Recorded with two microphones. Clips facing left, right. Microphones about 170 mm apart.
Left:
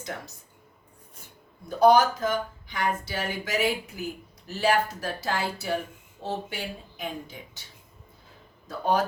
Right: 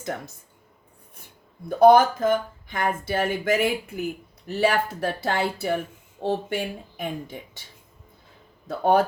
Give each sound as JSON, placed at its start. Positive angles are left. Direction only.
{"t": 0.1, "sound": "speech", "side_deg": -55}
{"t": 1.8, "sound": "speech", "side_deg": -55}
{"t": 8.6, "sound": "speech", "side_deg": -60}